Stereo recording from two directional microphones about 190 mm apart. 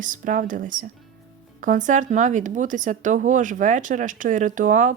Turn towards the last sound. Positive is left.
turn(degrees=-40)  # may be behind; listen again after turning